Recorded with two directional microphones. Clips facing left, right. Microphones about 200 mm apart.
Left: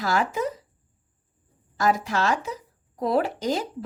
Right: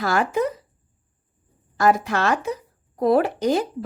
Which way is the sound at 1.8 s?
60° right (ahead or behind).